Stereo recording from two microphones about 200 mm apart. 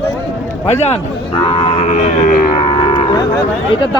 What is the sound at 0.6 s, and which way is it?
Cattle, 35° left (ahead or behind).